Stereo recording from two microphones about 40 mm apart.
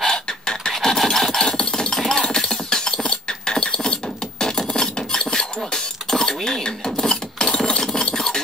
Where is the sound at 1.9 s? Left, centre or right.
Centre.